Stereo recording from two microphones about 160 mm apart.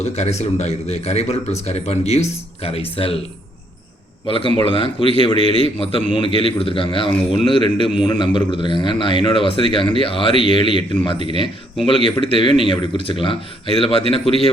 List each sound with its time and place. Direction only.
0.0 s speech: 45° left (ahead or behind)
4.3 s speech: 35° left (ahead or behind)